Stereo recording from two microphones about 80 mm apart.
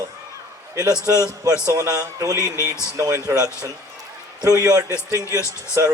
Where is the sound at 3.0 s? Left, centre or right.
Right.